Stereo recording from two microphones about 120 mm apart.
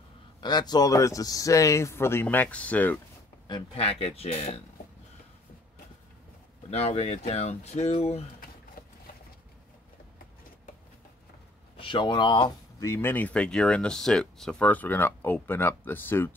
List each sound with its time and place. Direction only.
0.4 s speech: 35° left (ahead or behind); by 3.0 s 15° left (ahead or behind)
3.4 s speech: 40° left (ahead or behind)
3.8 s speech: 55° left (ahead or behind)
6.7 s speech: 60° left (ahead or behind)
11.7 s speech: 45° left (ahead or behind)
12.7 s speech: 25° left (ahead or behind)